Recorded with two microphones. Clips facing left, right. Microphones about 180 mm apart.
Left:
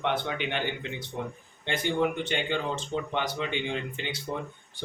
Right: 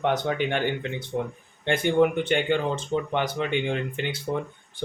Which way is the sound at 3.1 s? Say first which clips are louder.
Right 4 dB; 55° right (ahead or behind).